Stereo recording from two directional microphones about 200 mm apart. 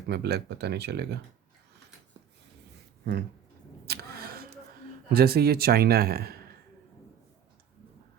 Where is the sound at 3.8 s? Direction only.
50° right (ahead or behind).